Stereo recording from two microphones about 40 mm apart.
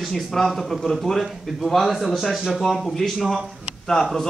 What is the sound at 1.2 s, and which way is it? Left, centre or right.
A man's voice, centre.